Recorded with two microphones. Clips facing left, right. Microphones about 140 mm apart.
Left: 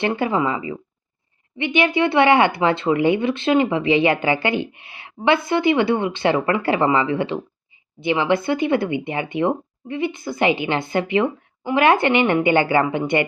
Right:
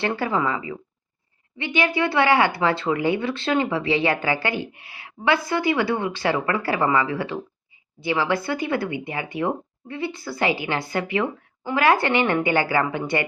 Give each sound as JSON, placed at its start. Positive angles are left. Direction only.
{"t": 0.0, "sound": "speech", "side_deg": 20}